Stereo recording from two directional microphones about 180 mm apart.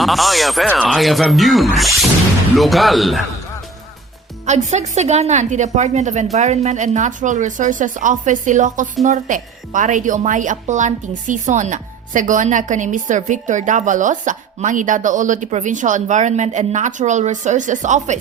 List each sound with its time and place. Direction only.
0.0 s speech: centre (ahead or behind)
4.4 s a woman's voice: 40° right (ahead or behind)